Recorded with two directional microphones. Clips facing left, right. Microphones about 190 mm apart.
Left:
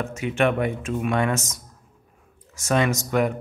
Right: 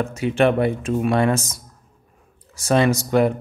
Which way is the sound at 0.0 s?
35° right (ahead or behind).